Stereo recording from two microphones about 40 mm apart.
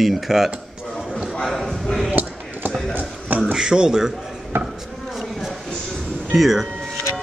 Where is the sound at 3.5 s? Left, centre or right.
Centre.